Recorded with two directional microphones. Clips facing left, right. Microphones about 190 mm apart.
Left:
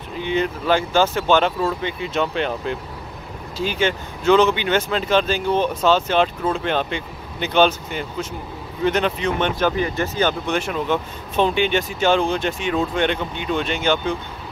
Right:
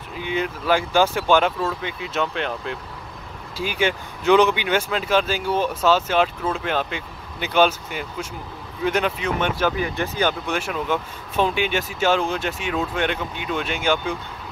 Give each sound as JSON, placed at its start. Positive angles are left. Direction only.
{"t": 0.2, "sound": "speech", "side_deg": -10}
{"t": 3.5, "sound": "speech", "side_deg": -10}